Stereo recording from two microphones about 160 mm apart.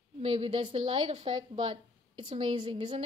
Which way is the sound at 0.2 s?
40° right (ahead or behind).